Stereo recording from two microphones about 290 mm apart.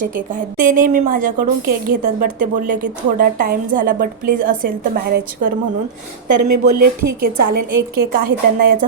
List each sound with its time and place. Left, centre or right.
0.0 s a woman's voice: right
6.2 s a woman's voice: right
7.9 s a woman's voice: right